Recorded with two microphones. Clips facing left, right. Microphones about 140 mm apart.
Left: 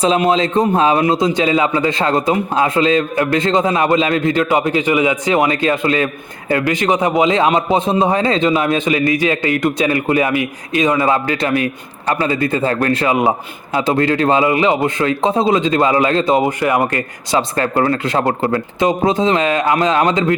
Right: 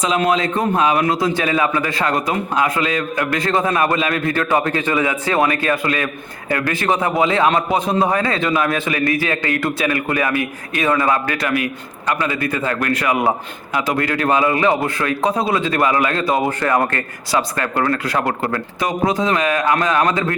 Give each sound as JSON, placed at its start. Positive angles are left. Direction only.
{"t": 0.0, "sound": "a man's voice", "side_deg": 25}
{"t": 17.3, "sound": "a man's voice", "side_deg": 30}